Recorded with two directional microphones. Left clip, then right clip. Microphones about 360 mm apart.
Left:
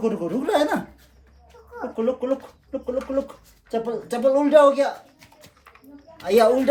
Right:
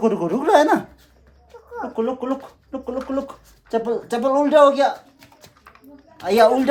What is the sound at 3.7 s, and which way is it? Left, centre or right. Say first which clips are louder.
Speech: right 4 dB; centre.